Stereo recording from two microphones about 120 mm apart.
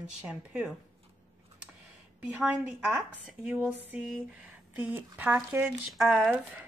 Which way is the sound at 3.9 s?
10° right (ahead or behind).